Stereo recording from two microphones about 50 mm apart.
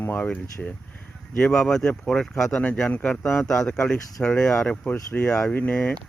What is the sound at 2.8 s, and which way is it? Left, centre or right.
Speech, left.